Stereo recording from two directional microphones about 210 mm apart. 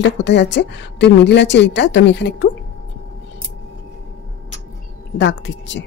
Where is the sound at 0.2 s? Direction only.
55° left (ahead or behind).